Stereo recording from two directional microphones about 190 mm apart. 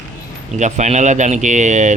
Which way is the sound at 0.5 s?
40° right (ahead or behind).